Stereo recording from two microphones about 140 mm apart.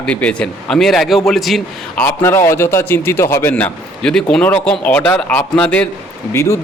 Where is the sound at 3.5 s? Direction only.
5° left (ahead or behind).